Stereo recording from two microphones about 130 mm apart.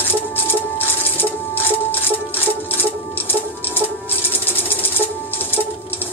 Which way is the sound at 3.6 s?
15° right (ahead or behind).